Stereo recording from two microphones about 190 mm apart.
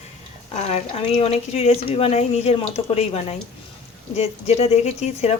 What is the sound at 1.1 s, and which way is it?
Speech, 35° left (ahead or behind).